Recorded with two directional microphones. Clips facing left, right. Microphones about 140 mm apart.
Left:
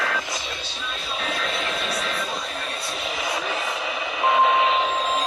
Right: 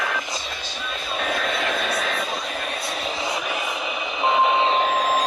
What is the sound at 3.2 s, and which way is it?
Reversing beeps, 20° right (ahead or behind).